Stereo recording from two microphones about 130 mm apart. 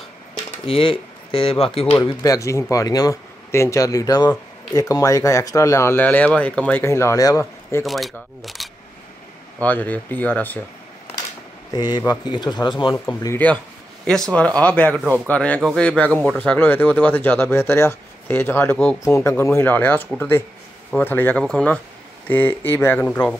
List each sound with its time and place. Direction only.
0.7 s speech: 45° left (ahead or behind)
2.2 s speech: 25° left (ahead or behind)
6.8 s speech: 20° left (ahead or behind)
7.8 s speech: centre (ahead or behind)
9.6 s speech: 15° left (ahead or behind)
11.7 s speech: 35° left (ahead or behind)
12.9 s speech: 20° left (ahead or behind)
14.0 s speech: 5° left (ahead or behind)